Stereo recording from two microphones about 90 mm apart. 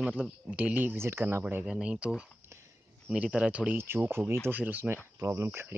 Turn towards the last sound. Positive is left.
turn(degrees=-25)  # may be behind; listen again after turning